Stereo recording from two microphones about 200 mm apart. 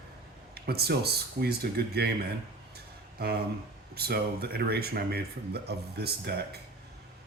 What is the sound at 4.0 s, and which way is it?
Speech, 50° right (ahead or behind).